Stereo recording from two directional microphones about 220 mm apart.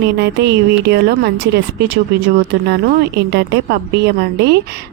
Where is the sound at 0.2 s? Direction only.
50° right (ahead or behind).